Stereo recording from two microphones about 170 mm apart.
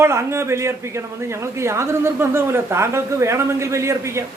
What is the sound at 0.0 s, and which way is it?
Speech, 15° right (ahead or behind).